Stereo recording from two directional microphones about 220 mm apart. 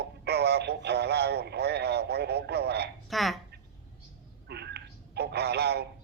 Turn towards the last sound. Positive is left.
turn(degrees=-50)  # may be behind; listen again after turning